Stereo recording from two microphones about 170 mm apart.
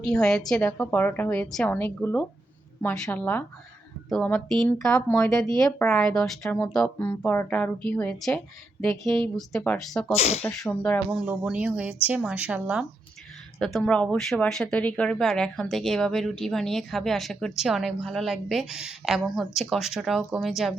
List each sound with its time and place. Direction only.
0.0 s a woman's voice: 5° left (ahead or behind)
10.2 s speech: 40° left (ahead or behind)
10.4 s a woman's voice: 10° left (ahead or behind)
11.1 s speech: 5° right (ahead or behind)